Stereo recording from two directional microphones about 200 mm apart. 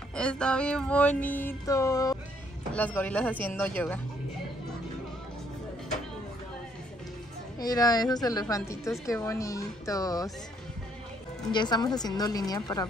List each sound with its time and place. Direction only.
0.1 s music: 5° left (ahead or behind)
7.5 s a woman's voice: 20° left (ahead or behind)
9.0 s music: 15° left (ahead or behind)
11.5 s a woman's voice: 20° left (ahead or behind)